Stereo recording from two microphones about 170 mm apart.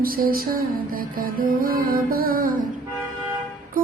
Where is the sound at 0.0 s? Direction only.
60° right (ahead or behind).